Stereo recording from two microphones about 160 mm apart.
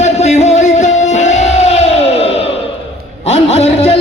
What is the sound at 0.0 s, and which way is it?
Music, 45° left (ahead or behind).